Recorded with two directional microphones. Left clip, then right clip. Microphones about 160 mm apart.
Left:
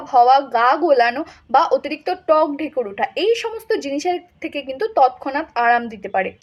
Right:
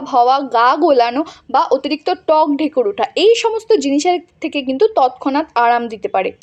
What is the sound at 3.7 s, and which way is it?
Speech, 40° right (ahead or behind).